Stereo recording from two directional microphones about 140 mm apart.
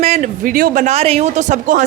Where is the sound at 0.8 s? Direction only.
45° right (ahead or behind).